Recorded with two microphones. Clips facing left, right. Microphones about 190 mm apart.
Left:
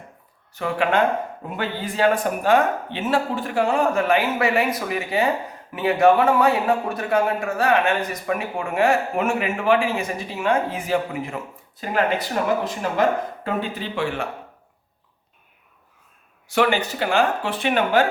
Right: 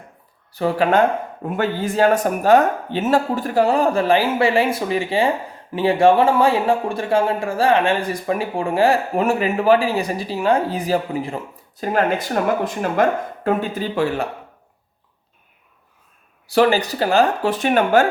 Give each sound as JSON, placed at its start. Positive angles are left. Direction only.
{"t": 0.5, "sound": "a man's voice", "side_deg": -35}
{"t": 16.5, "sound": "a man's voice", "side_deg": -35}